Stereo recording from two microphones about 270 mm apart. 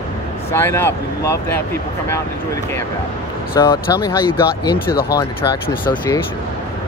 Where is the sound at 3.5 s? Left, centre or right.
Centre.